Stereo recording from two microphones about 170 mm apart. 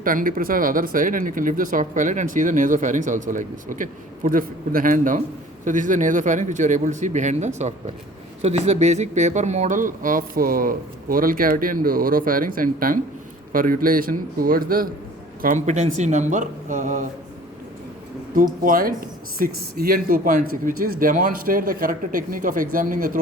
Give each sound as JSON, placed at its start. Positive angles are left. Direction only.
{"t": 0.0, "sound": "speech", "side_deg": -55}
{"t": 18.6, "sound": "speech", "side_deg": -55}